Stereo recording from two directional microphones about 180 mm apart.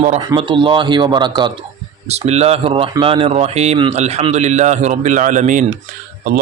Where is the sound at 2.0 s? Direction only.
35° right (ahead or behind).